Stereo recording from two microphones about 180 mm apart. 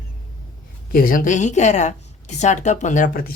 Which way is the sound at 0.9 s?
50° left (ahead or behind).